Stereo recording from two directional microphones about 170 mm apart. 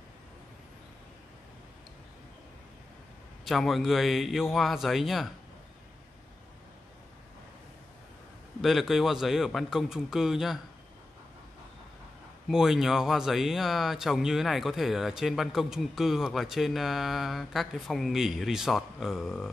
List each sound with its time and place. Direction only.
3.4 s speech: centre (ahead or behind)
8.5 s speech: centre (ahead or behind)
12.4 s speech: centre (ahead or behind)